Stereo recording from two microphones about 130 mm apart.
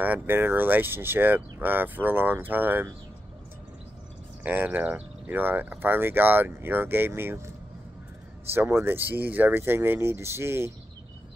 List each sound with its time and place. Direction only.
0.0 s speech: 15° right (ahead or behind)
4.4 s speech: 15° right (ahead or behind)